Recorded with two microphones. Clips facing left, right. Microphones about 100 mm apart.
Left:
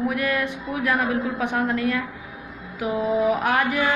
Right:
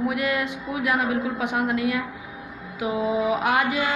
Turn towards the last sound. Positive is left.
turn(degrees=-20)  # may be behind; listen again after turning